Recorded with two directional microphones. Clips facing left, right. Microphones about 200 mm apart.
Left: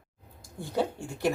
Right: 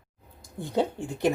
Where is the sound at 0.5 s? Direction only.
20° right (ahead or behind).